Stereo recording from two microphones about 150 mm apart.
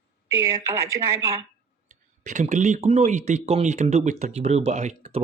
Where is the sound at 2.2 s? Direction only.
55° right (ahead or behind).